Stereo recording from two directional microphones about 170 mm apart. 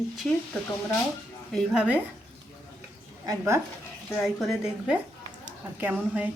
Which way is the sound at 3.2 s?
15° right (ahead or behind).